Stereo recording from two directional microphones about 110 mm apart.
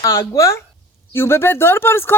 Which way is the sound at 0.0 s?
25° left (ahead or behind).